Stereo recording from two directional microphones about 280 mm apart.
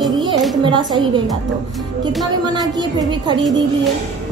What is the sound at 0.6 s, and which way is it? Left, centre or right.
Speech, centre.